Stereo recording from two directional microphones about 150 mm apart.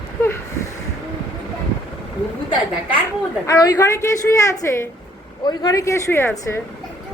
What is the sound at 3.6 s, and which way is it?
A woman's voice, 20° left (ahead or behind).